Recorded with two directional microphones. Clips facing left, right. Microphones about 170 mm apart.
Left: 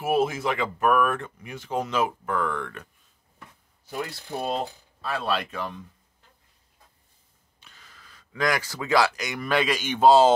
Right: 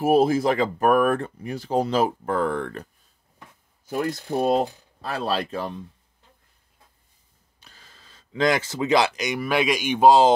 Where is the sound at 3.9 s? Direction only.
50° right (ahead or behind); by 5.8 s 35° right (ahead or behind).